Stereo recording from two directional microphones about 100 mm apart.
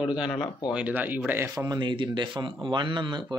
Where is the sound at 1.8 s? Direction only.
50° right (ahead or behind).